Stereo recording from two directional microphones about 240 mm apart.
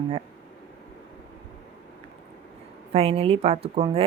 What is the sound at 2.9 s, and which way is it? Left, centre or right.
Speech, right.